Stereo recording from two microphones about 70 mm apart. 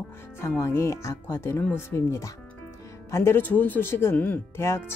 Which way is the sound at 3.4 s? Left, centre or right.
Left.